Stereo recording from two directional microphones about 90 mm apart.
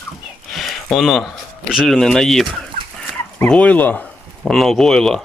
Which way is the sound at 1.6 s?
5° right (ahead or behind).